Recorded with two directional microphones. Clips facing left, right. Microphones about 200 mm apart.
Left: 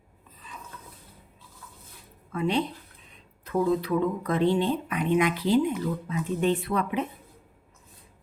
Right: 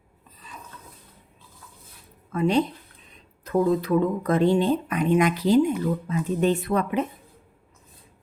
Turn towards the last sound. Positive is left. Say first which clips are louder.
# right 3 dB
turn(degrees=-45)  # may be behind; listen again after turning